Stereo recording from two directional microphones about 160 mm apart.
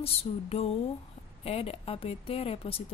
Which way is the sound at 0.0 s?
40° left (ahead or behind).